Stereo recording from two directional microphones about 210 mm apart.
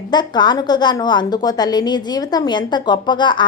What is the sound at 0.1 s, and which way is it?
A woman's voice, 20° left (ahead or behind).